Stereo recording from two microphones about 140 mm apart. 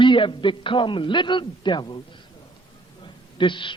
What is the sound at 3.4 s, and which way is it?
Speech, 35° left (ahead or behind).